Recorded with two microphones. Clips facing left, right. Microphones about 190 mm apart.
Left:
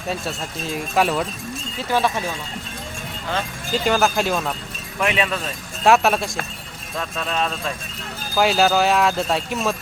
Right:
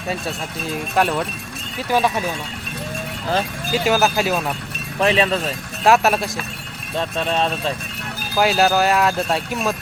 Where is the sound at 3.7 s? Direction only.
5° right (ahead or behind).